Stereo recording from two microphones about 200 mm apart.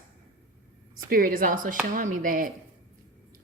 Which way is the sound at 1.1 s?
45° right (ahead or behind).